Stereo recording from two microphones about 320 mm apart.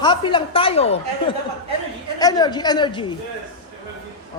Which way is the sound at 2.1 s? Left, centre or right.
Centre.